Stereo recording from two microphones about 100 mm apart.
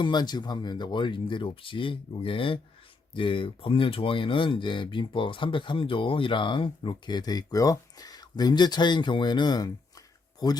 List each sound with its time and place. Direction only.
0.0 s speech: 45° left (ahead or behind)